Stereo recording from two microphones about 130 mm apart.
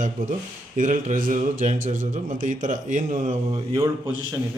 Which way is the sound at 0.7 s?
90° right.